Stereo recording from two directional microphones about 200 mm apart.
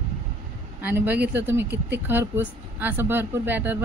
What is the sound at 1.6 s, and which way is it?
Speech, 55° right (ahead or behind).